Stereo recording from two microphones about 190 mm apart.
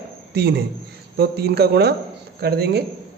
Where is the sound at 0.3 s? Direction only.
60° right (ahead or behind).